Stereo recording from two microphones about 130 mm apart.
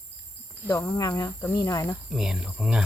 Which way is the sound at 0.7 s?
25° left (ahead or behind).